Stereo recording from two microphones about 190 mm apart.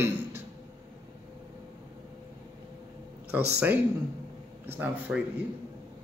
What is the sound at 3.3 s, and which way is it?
A man's voice, 10° right (ahead or behind).